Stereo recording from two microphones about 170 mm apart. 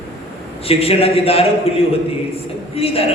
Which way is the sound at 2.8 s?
35° left (ahead or behind).